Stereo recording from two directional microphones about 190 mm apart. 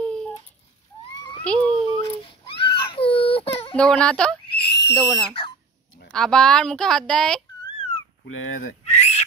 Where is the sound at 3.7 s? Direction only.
5° left (ahead or behind).